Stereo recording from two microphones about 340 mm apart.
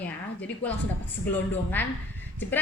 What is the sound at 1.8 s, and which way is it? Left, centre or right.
Speech, centre.